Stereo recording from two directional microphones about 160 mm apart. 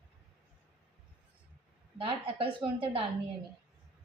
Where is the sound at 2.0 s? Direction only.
35° right (ahead or behind).